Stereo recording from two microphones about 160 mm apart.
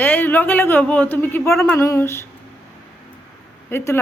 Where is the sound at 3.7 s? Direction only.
15° left (ahead or behind).